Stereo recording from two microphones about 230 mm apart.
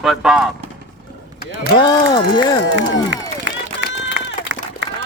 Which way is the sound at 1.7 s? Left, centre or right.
Centre.